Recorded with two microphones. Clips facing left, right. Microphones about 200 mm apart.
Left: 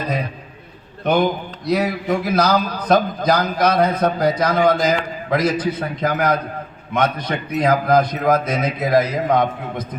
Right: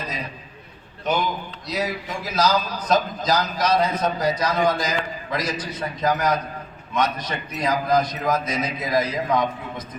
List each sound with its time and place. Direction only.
1.0 s a man's voice: 60° left (ahead or behind)